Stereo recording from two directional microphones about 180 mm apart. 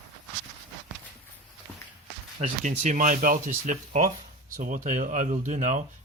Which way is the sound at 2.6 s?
45° right (ahead or behind).